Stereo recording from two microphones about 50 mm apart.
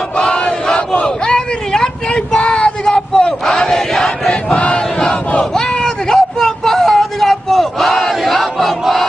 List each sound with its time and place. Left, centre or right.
0.2 s battle cry: centre
4.3 s battle cry: left
5.5 s a sound: centre